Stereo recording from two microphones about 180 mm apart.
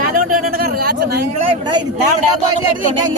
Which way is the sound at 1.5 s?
25° right (ahead or behind).